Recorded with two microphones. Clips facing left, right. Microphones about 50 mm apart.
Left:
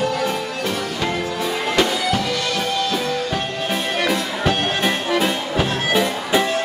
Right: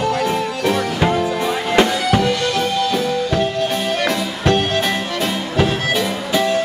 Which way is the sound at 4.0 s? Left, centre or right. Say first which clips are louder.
Right 1 dB; centre.